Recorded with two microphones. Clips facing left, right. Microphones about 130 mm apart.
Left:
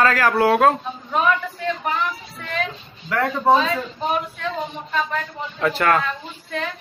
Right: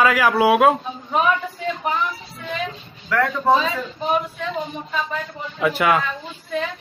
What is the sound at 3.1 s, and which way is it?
Speech, 20° left (ahead or behind).